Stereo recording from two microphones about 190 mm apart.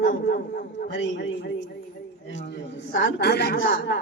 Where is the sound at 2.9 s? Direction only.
70° left (ahead or behind).